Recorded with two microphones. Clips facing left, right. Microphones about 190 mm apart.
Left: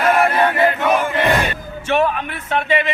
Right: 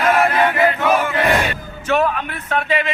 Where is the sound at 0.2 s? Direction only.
5° left (ahead or behind).